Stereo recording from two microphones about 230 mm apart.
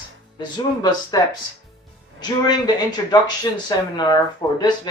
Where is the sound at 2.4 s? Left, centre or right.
Centre.